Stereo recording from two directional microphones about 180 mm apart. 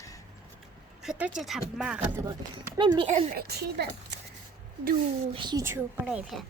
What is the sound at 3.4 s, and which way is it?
Speech, 60° right (ahead or behind).